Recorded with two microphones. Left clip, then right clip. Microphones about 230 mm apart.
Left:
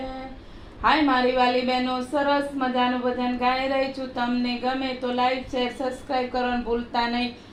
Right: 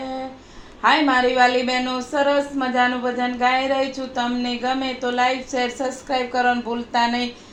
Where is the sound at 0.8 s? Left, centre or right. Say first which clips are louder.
Right 3 dB; right.